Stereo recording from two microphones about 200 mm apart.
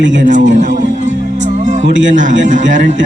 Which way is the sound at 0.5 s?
40° right (ahead or behind).